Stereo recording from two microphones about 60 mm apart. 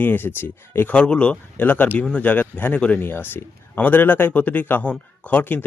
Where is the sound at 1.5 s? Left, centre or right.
Left.